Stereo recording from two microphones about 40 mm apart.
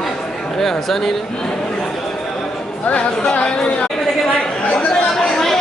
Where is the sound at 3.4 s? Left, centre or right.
Left.